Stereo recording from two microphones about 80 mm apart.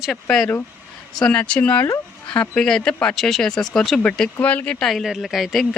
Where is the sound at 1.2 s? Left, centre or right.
Centre.